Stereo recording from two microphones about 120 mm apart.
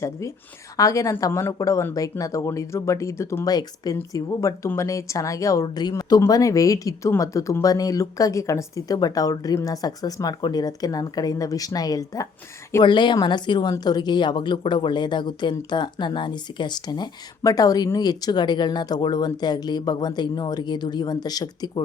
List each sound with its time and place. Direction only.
0.0 s speech: 25° left (ahead or behind)
12.8 s speech: 40° left (ahead or behind)